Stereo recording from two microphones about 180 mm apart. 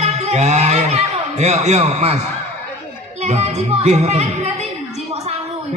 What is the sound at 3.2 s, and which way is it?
A man's voice, 40° right (ahead or behind).